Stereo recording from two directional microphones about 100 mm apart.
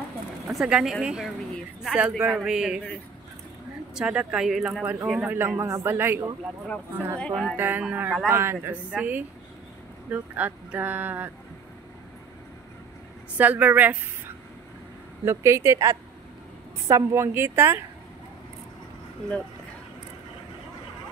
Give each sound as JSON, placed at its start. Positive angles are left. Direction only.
{"t": 0.5, "sound": "speech", "side_deg": -5}
{"t": 3.9, "sound": "speech", "side_deg": -10}
{"t": 5.6, "sound": "a woman's voice", "side_deg": -25}
{"t": 7.2, "sound": "speech", "side_deg": 5}
{"t": 7.5, "sound": "a woman's voice", "side_deg": -20}
{"t": 13.4, "sound": "speech", "side_deg": -15}
{"t": 15.2, "sound": "a woman's voice", "side_deg": -30}